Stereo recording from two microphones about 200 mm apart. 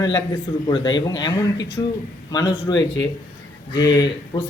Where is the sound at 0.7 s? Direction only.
20° left (ahead or behind).